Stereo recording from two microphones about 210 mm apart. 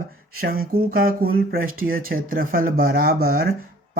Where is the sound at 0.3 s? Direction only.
45° right (ahead or behind).